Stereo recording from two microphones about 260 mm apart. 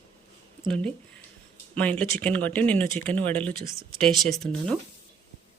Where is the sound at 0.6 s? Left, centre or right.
Centre.